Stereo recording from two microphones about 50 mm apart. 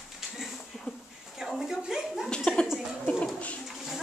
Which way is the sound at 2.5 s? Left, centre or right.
Left.